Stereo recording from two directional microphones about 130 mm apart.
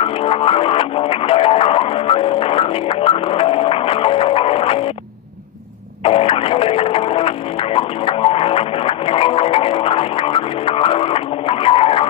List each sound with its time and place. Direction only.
0.0 s music: 45° left (ahead or behind)
6.0 s music: 45° left (ahead or behind)